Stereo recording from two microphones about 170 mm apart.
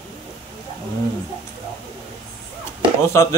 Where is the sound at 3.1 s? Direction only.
15° left (ahead or behind).